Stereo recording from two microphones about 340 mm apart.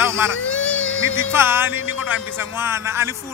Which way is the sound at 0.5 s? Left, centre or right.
Centre.